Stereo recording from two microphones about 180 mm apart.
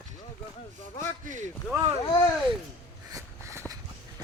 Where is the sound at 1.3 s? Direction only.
40° right (ahead or behind).